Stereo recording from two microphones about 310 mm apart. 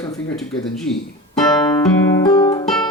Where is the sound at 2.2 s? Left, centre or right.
Centre.